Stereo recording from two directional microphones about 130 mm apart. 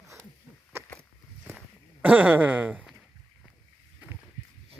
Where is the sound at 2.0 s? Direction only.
10° right (ahead or behind).